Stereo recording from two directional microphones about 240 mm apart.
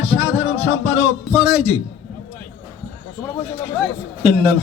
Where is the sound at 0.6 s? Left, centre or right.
Left.